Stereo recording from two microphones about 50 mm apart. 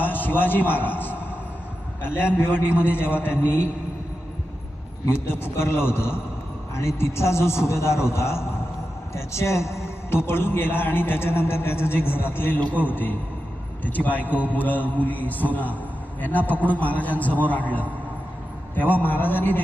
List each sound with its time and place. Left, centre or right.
0.0 s a man's voice: left
5.0 s a man's voice: left
7.0 s a man's voice: left
12.5 s a man's voice: left
18.9 s a man's voice: left